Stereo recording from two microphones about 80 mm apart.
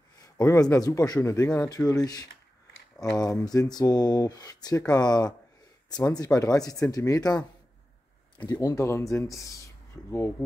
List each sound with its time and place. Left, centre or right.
0.6 s speech: left
1.2 s speech: left
1.9 s speech: left
8.5 s speech: left
8.8 s speech: left